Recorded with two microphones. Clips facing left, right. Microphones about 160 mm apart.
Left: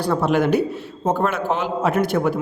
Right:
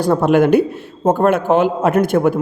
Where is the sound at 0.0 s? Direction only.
45° right (ahead or behind).